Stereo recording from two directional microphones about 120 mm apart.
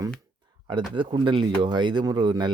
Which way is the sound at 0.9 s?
40° right (ahead or behind).